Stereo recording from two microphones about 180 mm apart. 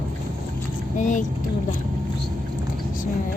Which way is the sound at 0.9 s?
45° left (ahead or behind).